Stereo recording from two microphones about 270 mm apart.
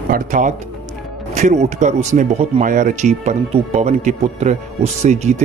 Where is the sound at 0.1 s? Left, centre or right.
Right.